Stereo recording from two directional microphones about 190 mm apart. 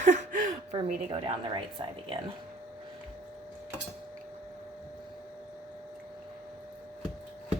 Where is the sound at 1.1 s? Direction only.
25° right (ahead or behind).